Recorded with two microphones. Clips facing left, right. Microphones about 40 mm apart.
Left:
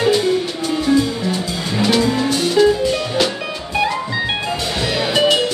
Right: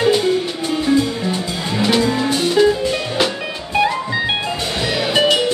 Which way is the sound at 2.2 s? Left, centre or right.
Centre.